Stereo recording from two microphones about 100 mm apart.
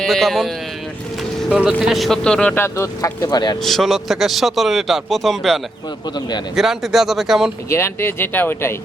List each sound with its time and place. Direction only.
0.0 s a man's voice: centre (ahead or behind)
1.5 s a man's voice: 10° right (ahead or behind); by 2.6 s 10° left (ahead or behind)
2.6 s speech: 25° left (ahead or behind)
3.2 s speech: 45° left (ahead or behind)
3.6 s a man's voice: centre (ahead or behind)
6.6 s a man's voice: 5° right (ahead or behind)
7.7 s speech: 25° left (ahead or behind)